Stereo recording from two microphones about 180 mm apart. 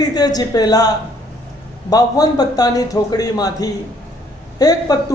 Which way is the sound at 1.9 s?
20° left (ahead or behind).